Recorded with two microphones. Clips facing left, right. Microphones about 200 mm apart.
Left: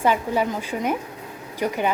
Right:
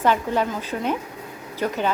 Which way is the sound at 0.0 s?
10° left (ahead or behind).